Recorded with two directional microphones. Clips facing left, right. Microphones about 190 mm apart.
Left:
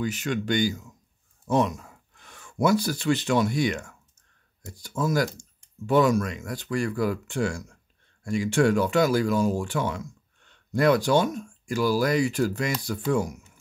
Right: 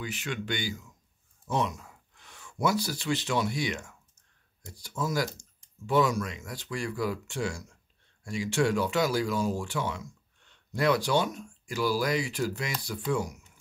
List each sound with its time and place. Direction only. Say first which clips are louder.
0.0 s speech: left 7 dB; 45° left (ahead or behind)
4.8 s speech: left 5 dB; 50° left (ahead or behind)